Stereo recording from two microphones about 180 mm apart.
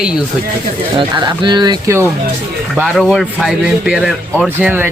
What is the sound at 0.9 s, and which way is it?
Speech, 25° right (ahead or behind).